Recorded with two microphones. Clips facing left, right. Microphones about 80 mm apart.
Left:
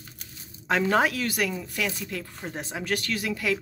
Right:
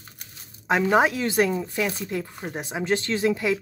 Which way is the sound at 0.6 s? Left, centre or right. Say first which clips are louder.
Right 3 dB; centre.